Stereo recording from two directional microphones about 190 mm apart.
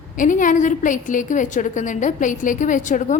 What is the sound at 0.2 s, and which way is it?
A woman's voice, 45° left (ahead or behind).